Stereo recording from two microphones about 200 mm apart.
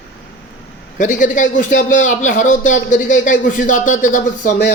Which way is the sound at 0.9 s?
40° left (ahead or behind).